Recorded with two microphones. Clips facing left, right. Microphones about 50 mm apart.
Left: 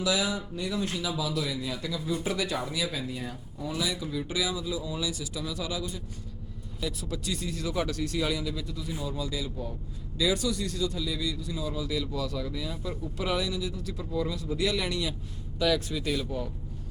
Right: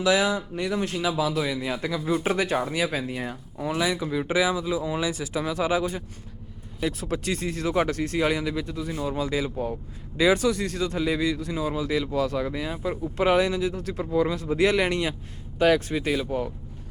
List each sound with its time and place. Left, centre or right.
0.0 s speech: right
6.8 s speech: right